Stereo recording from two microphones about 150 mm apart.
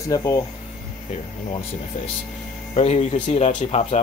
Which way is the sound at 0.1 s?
25° left (ahead or behind).